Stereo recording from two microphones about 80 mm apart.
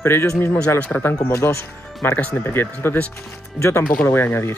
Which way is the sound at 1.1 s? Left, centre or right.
Left.